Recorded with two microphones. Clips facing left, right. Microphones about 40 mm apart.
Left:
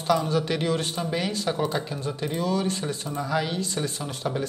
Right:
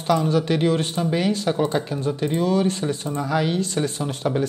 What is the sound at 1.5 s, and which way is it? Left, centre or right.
Speech, centre.